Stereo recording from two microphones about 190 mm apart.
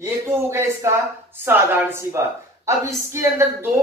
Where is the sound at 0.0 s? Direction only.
15° right (ahead or behind).